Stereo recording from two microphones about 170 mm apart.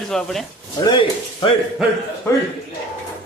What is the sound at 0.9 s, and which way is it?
Speech, 25° left (ahead or behind).